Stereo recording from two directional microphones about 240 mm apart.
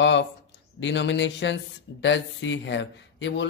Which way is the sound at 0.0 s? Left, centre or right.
Left.